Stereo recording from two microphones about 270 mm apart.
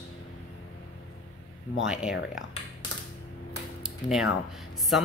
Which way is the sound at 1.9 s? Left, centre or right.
Centre.